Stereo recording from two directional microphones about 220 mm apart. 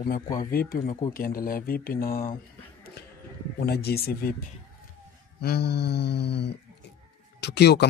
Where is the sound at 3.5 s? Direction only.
45° left (ahead or behind).